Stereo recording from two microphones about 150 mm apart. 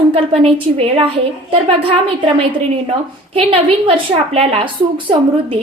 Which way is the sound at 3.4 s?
35° right (ahead or behind).